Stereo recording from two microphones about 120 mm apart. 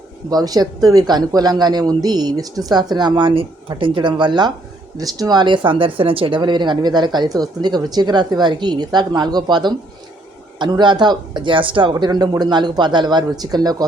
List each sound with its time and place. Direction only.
0.3 s speech: 30° right (ahead or behind)